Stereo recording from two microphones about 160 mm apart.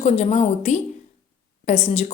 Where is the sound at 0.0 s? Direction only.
40° left (ahead or behind).